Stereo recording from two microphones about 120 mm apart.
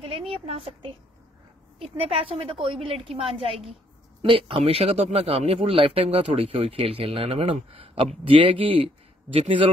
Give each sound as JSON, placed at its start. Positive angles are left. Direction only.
{"t": 0.3, "sound": "speech", "side_deg": -55}